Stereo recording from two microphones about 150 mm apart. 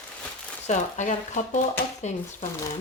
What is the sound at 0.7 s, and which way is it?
Speech, 50° left (ahead or behind).